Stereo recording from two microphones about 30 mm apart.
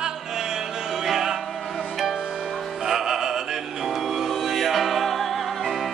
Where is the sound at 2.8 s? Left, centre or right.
Centre.